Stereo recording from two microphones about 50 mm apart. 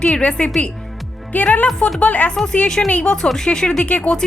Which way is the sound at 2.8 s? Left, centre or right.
Left.